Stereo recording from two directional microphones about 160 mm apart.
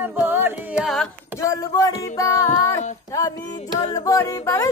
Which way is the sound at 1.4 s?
20° left (ahead or behind).